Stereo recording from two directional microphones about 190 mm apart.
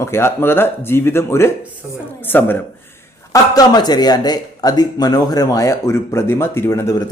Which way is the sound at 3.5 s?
20° left (ahead or behind).